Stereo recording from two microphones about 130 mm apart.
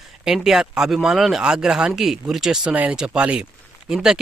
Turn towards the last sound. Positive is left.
turn(degrees=-5)  # may be behind; listen again after turning